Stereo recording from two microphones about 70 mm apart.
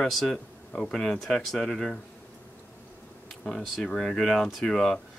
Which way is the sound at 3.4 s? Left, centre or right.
Centre.